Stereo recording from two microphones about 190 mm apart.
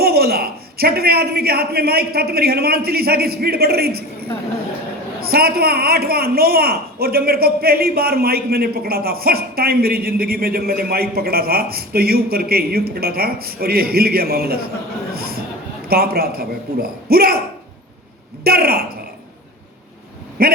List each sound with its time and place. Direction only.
0.0 s a man's voice: 55° right (ahead or behind)
5.2 s a man's voice: 55° right (ahead or behind)
15.1 s a sound: 55° right (ahead or behind)
15.9 s a man's voice: 55° right (ahead or behind)
18.4 s a man's voice: 55° right (ahead or behind)
20.4 s a man's voice: 55° right (ahead or behind)